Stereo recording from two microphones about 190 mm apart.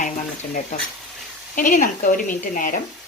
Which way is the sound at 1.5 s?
45° left (ahead or behind).